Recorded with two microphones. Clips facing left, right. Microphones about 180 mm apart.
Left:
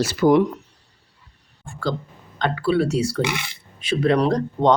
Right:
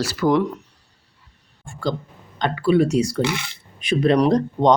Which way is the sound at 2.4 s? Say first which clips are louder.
Right 2 dB; 15° right (ahead or behind).